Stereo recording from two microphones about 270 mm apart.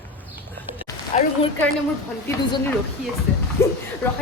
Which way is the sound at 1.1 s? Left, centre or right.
Left.